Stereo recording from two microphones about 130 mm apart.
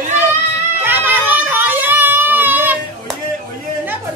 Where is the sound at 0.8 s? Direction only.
15° right (ahead or behind).